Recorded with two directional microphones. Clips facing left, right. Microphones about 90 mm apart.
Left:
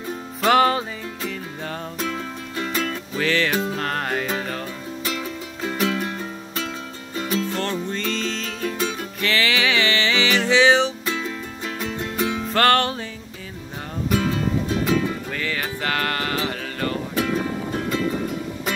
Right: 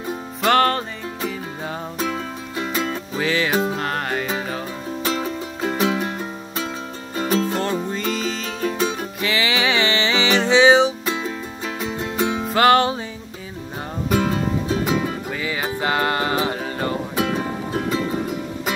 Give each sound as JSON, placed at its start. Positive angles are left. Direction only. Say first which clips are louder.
{"t": 0.5, "sound": "music", "louder": "even", "side_deg": 5}
{"t": 1.2, "sound": "music", "louder": "right 3 dB", "side_deg": -15}
{"t": 3.7, "sound": "music", "louder": "right 1 dB", "side_deg": -5}
{"t": 5.0, "sound": "music", "louder": "right 5 dB", "side_deg": -35}
{"t": 5.9, "sound": "music", "louder": "right 2 dB", "side_deg": -20}
{"t": 7.2, "sound": "music", "louder": "right 4 dB", "side_deg": -35}
{"t": 7.9, "sound": "music", "louder": "right 2 dB", "side_deg": -10}
{"t": 8.7, "sound": "music", "louder": "right 3 dB", "side_deg": -30}
{"t": 9.2, "sound": "music", "louder": "even", "side_deg": -15}
{"t": 12.2, "sound": "music", "louder": "right 2 dB", "side_deg": -25}
{"t": 12.4, "sound": "music", "louder": "right 3 dB", "side_deg": -15}
{"t": 14.0, "sound": "music", "louder": "right 2 dB", "side_deg": -30}
{"t": 14.9, "sound": "music", "louder": "even", "side_deg": -15}